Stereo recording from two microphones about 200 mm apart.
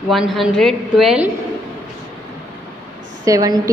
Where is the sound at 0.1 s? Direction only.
Centre (ahead or behind).